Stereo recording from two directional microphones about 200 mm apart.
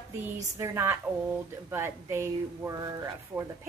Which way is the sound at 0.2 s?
10° right (ahead or behind).